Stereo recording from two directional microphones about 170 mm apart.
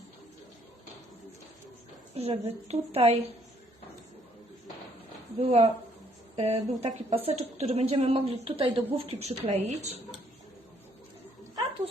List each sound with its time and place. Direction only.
2.1 s speech: 35° right (ahead or behind)
5.4 s speech: 35° right (ahead or behind)